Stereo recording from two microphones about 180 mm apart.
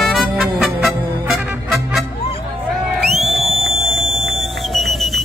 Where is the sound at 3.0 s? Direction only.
Centre (ahead or behind).